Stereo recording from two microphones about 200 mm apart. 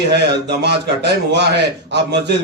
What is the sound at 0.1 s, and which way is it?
A man's voice, 55° right (ahead or behind).